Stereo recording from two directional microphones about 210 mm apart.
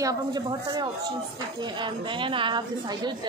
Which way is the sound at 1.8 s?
25° right (ahead or behind).